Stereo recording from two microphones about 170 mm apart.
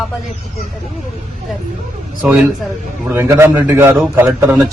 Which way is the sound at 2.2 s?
5° right (ahead or behind).